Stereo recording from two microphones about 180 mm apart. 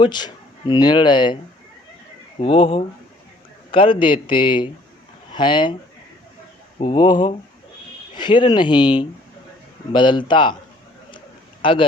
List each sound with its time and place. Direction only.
0.0 s speech: 25° left (ahead or behind)
2.4 s speech: 30° left (ahead or behind)
6.7 s speech: 30° left (ahead or behind)
11.6 s a man's voice: 30° left (ahead or behind)